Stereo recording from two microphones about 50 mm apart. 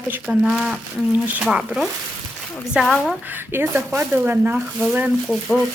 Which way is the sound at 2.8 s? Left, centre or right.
Right.